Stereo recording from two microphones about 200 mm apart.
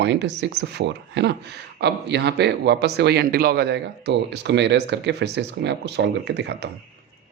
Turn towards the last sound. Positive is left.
turn(degrees=-55)  # may be behind; listen again after turning